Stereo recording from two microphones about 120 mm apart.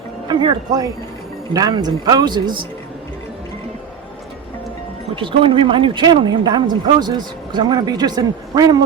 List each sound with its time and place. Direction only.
0.3 s speech: 35° right (ahead or behind)
5.1 s speech: 45° right (ahead or behind)